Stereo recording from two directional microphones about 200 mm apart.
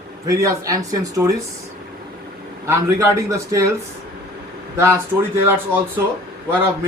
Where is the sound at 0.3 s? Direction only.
15° right (ahead or behind).